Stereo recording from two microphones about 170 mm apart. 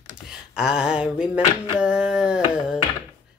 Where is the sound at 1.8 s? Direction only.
5° right (ahead or behind).